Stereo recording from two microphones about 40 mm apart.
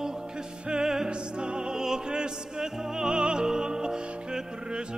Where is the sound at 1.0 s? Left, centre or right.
Right.